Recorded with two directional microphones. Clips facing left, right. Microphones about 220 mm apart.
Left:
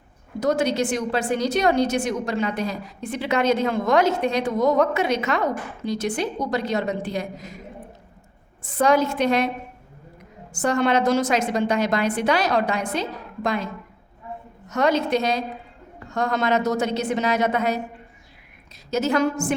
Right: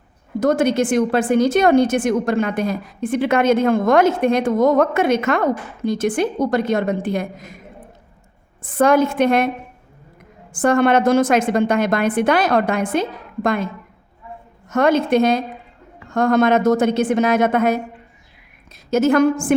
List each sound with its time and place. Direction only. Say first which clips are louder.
0.3 s a woman's voice: right 5 dB; 50° right (ahead or behind)
8.6 s a woman's voice: right 4 dB; 55° right (ahead or behind)
10.5 s a woman's voice: right 5 dB; 55° right (ahead or behind)
14.7 s a woman's voice: right 5 dB; 50° right (ahead or behind)
18.9 s a woman's voice: right 7 dB; 50° right (ahead or behind)